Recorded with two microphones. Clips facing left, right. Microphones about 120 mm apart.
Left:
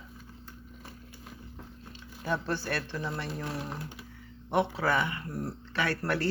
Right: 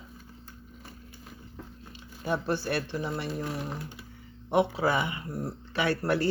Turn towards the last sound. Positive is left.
turn(degrees=-20)  # may be behind; listen again after turning